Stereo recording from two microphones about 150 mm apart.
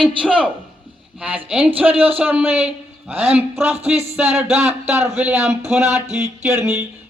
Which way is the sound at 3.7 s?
45° right (ahead or behind).